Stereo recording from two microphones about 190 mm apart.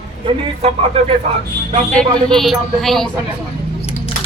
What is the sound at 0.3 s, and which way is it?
Speech, 30° right (ahead or behind).